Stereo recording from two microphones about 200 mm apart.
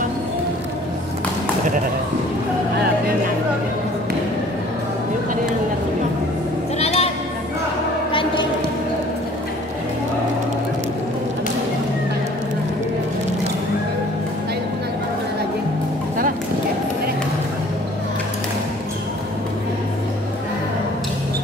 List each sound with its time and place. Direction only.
6.8 s bleat: 30° left (ahead or behind)
8.1 s music: 25° left (ahead or behind)